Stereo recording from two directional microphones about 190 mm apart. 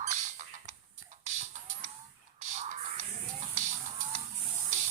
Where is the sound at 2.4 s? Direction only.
40° right (ahead or behind).